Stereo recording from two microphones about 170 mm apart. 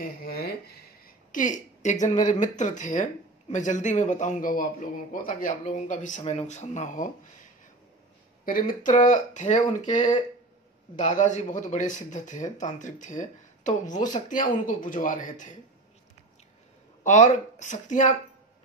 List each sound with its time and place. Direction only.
0.0 s speech: 65° left (ahead or behind); by 7.1 s 45° left (ahead or behind)
8.5 s speech: 55° left (ahead or behind)
11.0 s speech: 45° left (ahead or behind)
17.0 s speech: 45° left (ahead or behind)